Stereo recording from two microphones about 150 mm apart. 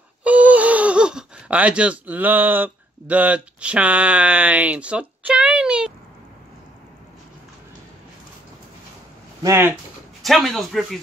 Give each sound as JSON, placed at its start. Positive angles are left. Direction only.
{"t": 0.2, "sound": "speech", "side_deg": -10}
{"t": 9.4, "sound": "speech", "side_deg": -15}
{"t": 10.2, "sound": "speech", "side_deg": 0}